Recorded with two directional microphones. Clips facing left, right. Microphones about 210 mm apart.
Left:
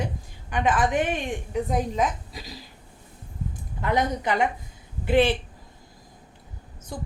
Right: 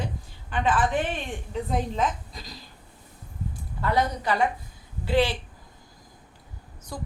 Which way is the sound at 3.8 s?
20° left (ahead or behind).